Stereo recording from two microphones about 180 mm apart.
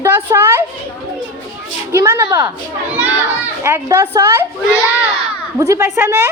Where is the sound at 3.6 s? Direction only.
15° right (ahead or behind).